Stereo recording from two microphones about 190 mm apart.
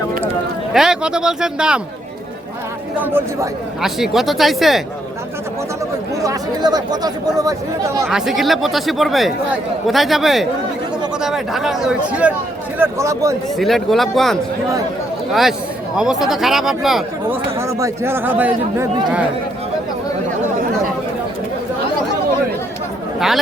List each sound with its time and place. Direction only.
0.7 s speech: 5° right (ahead or behind)
3.0 s speech: 10° right (ahead or behind)
6.2 s speech: 20° right (ahead or behind)
8.0 s speech: centre (ahead or behind)
13.6 s speech: centre (ahead or behind)
17.6 s speech: 15° right (ahead or behind)